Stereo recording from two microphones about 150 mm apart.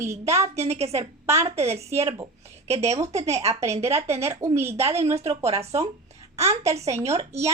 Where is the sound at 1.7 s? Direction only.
45° right (ahead or behind).